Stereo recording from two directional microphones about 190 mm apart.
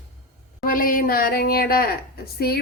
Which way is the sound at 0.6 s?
45° left (ahead or behind).